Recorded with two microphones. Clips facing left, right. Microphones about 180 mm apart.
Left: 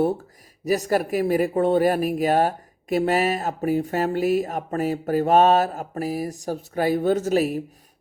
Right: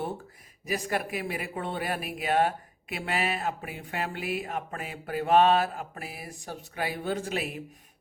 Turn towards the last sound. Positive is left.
turn(degrees=40)  # may be behind; listen again after turning